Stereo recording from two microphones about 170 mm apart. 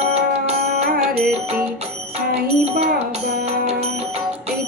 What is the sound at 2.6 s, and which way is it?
Music, 35° right (ahead or behind).